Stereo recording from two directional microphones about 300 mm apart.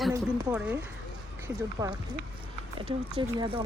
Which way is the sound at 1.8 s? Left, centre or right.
Centre.